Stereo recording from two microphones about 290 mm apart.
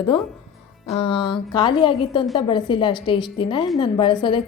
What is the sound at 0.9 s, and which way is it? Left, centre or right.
A woman's voice, centre.